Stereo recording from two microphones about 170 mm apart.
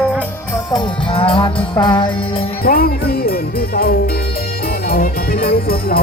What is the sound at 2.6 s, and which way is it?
Music, 60° left (ahead or behind).